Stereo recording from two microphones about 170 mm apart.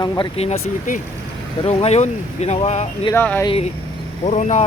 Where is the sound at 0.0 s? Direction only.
25° left (ahead or behind).